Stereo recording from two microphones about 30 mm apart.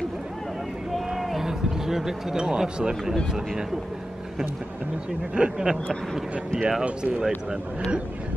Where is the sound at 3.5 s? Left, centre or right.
Centre.